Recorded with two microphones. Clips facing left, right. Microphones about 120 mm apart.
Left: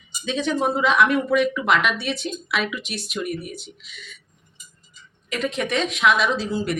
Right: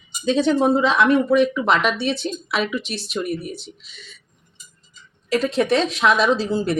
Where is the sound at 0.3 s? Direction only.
35° right (ahead or behind).